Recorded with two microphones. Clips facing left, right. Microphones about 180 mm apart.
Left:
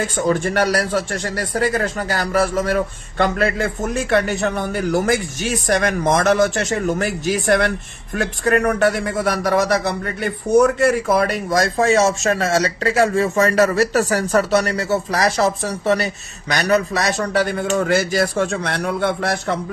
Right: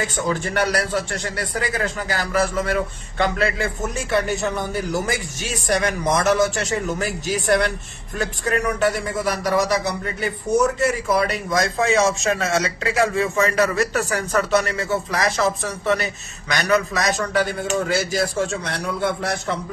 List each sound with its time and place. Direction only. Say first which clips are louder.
0.3 s a man's voice: left 4 dB; 50° left (ahead or behind)
17.8 s a man's voice: left 4 dB; 60° left (ahead or behind)